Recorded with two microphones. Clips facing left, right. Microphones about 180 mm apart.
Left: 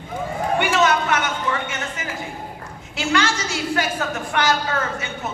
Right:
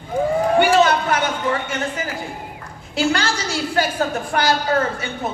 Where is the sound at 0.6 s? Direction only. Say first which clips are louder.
Right 2 dB; 35° right (ahead or behind).